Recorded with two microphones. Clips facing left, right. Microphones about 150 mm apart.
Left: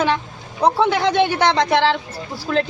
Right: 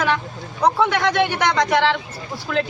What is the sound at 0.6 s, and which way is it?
Speech, 30° left (ahead or behind).